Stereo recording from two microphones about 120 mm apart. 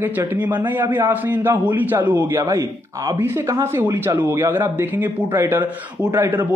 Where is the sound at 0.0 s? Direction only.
15° right (ahead or behind).